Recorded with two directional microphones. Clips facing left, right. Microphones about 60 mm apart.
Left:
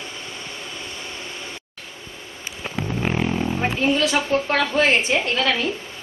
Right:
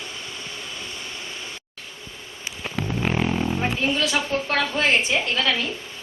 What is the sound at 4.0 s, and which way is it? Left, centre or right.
A woman's voice, left.